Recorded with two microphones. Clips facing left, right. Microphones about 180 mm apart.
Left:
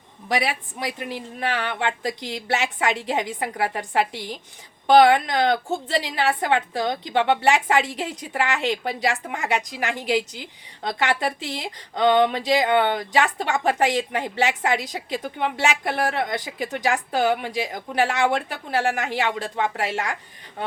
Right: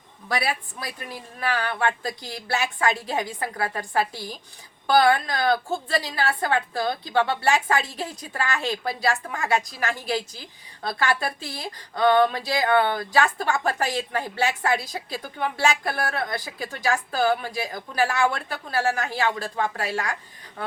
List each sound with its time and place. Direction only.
0.3 s a woman's voice: 20° left (ahead or behind)